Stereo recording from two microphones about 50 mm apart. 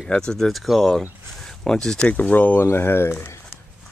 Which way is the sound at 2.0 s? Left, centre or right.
Left.